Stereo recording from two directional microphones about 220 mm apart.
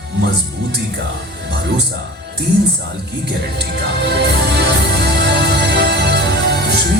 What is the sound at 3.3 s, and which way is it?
Music, 50° right (ahead or behind).